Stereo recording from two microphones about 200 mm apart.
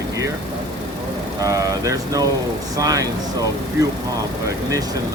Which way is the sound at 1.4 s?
15° right (ahead or behind).